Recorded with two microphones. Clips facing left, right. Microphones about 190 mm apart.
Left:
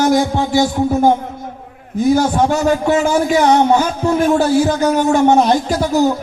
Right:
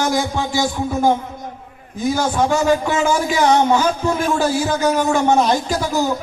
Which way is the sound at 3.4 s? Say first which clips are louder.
Left 1 dB; 40° left (ahead or behind).